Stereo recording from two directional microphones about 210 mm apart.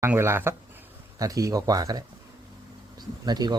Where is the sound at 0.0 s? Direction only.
10° right (ahead or behind).